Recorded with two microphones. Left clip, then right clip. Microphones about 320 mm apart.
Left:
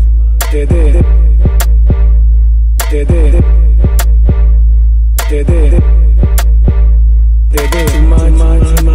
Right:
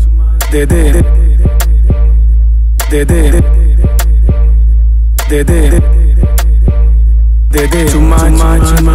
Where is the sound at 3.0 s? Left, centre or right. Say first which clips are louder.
Right 5 dB; right.